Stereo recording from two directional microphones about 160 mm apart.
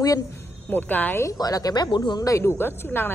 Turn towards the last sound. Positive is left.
turn(degrees=15)  # may be behind; listen again after turning